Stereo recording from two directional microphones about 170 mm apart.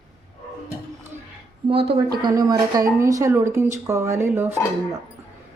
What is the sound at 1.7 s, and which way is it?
Speech, 35° right (ahead or behind).